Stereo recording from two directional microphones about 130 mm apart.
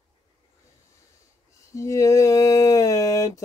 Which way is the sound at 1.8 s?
25° left (ahead or behind).